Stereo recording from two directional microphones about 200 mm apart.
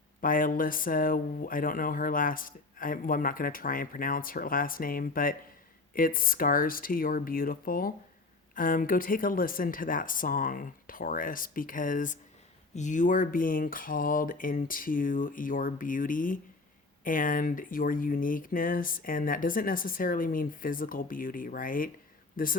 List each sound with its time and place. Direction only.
0.2 s speech: 45° left (ahead or behind)